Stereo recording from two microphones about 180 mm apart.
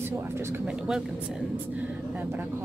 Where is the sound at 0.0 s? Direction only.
15° right (ahead or behind).